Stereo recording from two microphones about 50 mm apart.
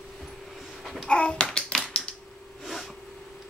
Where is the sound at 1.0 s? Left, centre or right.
Centre.